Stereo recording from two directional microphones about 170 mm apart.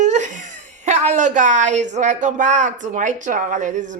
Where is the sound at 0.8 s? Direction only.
40° right (ahead or behind).